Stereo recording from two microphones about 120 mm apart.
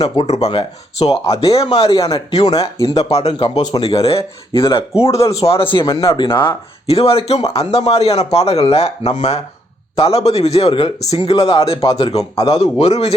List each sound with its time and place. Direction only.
0.0 s speech: 60° left (ahead or behind); by 2.1 s 30° left (ahead or behind)
3.0 s speech: 60° left (ahead or behind)
3.3 s speech: 40° left (ahead or behind)
3.8 s speech: 55° left (ahead or behind)
5.9 s speech: 30° left (ahead or behind)
6.1 s speech: 40° left (ahead or behind)
6.8 s speech: 55° left (ahead or behind)
10.0 s speech: 55° left (ahead or behind)